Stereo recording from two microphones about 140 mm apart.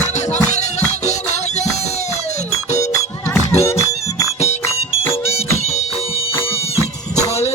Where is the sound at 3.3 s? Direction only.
20° left (ahead or behind).